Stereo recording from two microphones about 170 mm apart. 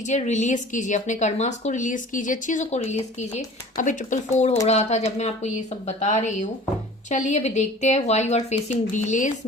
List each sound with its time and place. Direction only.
0.1 s speech: 45° left (ahead or behind)